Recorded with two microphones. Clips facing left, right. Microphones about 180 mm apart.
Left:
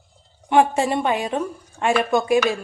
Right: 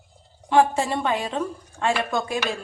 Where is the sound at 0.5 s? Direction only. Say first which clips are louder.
Left 2 dB; 20° left (ahead or behind).